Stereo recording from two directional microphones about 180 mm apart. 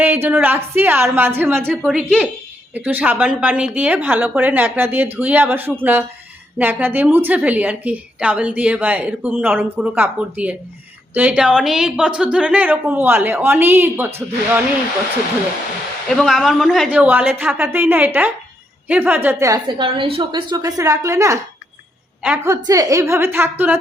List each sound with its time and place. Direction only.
0.0 s a woman's voice: 10° right (ahead or behind)
16.0 s a woman's voice: centre (ahead or behind)
22.6 s a woman's voice: 20° right (ahead or behind)